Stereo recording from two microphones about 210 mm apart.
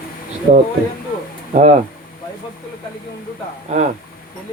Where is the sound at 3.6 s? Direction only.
35° right (ahead or behind).